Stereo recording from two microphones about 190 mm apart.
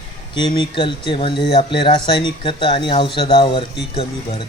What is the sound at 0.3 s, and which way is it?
Speech, 25° left (ahead or behind).